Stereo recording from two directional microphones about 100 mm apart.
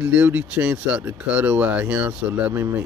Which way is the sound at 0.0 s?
15° right (ahead or behind).